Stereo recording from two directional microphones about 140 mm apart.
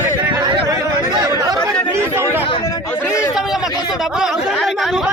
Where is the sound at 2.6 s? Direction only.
20° left (ahead or behind).